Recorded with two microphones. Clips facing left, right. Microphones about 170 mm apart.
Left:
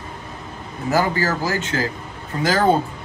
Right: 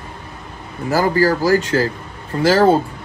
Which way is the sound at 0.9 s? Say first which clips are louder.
Right 5 dB; 40° right (ahead or behind).